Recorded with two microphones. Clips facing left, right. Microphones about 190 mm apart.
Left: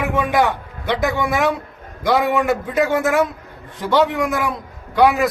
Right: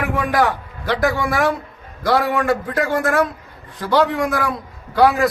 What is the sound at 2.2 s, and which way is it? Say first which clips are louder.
Speech: left 2 dB; 20° left (ahead or behind).